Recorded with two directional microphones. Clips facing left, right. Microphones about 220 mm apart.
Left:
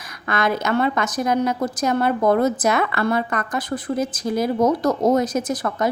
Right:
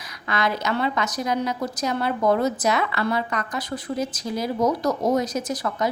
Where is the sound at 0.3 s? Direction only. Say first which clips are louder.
Left 3 dB; 50° left (ahead or behind).